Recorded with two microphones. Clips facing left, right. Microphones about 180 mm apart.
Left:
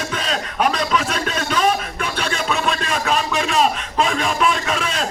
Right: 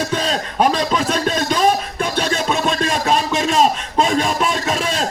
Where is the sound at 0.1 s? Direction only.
35° right (ahead or behind).